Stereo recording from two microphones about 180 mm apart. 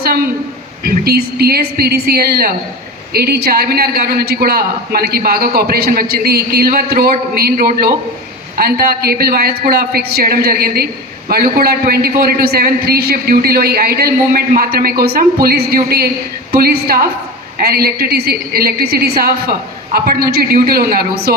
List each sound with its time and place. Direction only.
0.9 s a man's voice: 60° right (ahead or behind)